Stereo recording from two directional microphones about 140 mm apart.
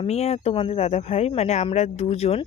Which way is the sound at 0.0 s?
50° left (ahead or behind).